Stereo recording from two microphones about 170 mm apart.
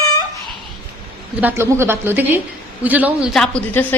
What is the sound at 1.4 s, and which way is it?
A woman's voice, 15° right (ahead or behind).